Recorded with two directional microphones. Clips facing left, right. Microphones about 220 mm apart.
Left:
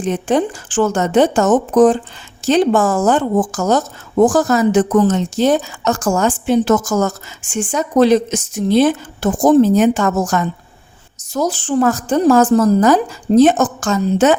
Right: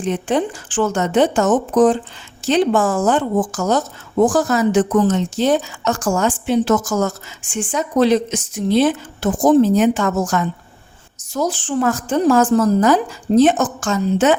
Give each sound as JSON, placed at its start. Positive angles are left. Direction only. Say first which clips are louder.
{"t": 0.0, "sound": "a woman's voice", "louder": "left 3 dB", "side_deg": 45}